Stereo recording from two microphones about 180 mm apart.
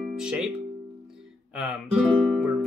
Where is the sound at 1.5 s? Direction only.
Centre (ahead or behind).